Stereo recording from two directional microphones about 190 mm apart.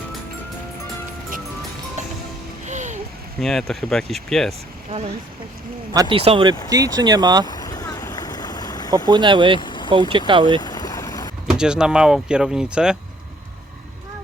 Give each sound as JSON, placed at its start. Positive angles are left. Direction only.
{"t": 2.0, "sound": "music", "side_deg": -40}
{"t": 3.4, "sound": "speech", "side_deg": 0}
{"t": 5.9, "sound": "speech", "side_deg": -25}
{"t": 7.4, "sound": "vehicle", "side_deg": 20}
{"t": 9.0, "sound": "speech", "side_deg": -25}
{"t": 9.6, "sound": "vehicle", "side_deg": 25}
{"t": 9.9, "sound": "speech", "side_deg": -25}
{"t": 10.6, "sound": "vehicle", "side_deg": 20}
{"t": 11.4, "sound": "speech", "side_deg": -5}